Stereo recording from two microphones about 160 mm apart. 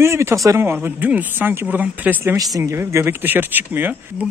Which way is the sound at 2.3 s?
20° right (ahead or behind).